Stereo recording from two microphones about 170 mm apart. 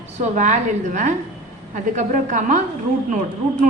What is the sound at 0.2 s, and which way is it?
A woman's voice, 45° right (ahead or behind).